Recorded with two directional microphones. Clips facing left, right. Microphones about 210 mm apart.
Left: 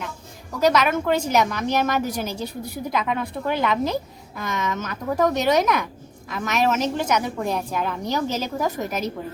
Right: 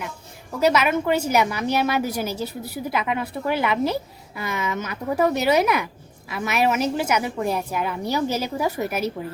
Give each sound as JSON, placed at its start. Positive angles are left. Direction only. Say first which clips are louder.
{"t": 0.6, "sound": "speech", "louder": "even", "side_deg": -10}